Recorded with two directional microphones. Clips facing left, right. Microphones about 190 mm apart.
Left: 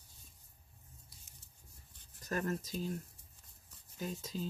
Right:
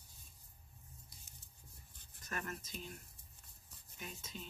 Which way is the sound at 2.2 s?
35° left (ahead or behind).